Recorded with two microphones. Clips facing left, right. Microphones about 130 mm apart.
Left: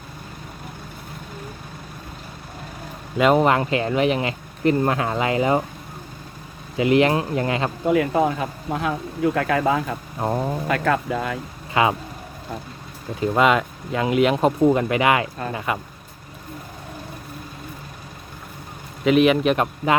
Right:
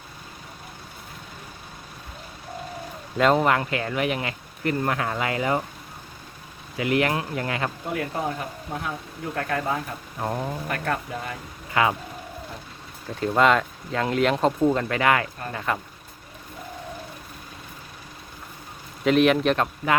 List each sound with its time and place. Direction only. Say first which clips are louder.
3.3 s speech: left 4 dB; 20° left (ahead or behind)
6.7 s speech: left 6 dB; 25° left (ahead or behind)
7.9 s speech: left 12 dB; 90° left
10.2 s speech: left 4 dB; 25° left (ahead or behind)
10.7 s speech: left 9 dB; 90° left
11.7 s speech: left 3 dB; 20° left (ahead or behind)
13.1 s speech: left 2 dB; 5° left (ahead or behind)
19.0 s a man's voice: left 2 dB; 5° left (ahead or behind)
19.5 s speech: left 3 dB; 20° left (ahead or behind)